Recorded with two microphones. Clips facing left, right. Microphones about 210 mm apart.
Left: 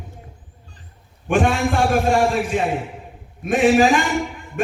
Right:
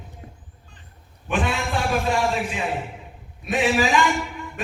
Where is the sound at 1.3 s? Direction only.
50° left (ahead or behind).